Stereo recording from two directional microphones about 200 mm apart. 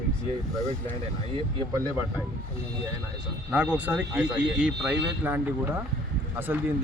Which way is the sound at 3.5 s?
10° right (ahead or behind).